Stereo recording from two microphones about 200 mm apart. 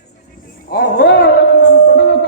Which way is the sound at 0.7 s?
55° left (ahead or behind).